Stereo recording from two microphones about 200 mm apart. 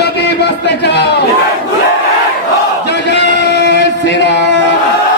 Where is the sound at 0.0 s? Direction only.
55° left (ahead or behind).